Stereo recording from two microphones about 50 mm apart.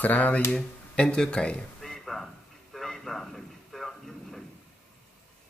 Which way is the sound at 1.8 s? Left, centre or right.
Centre.